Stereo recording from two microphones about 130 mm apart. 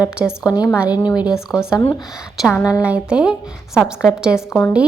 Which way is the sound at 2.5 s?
30° left (ahead or behind).